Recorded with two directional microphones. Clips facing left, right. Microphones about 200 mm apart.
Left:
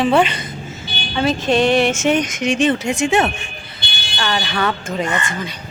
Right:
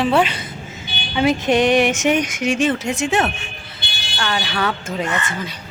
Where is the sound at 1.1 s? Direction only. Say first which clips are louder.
Even; 15° right (ahead or behind).